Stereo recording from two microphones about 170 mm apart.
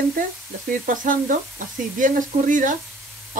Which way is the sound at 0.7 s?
55° right (ahead or behind).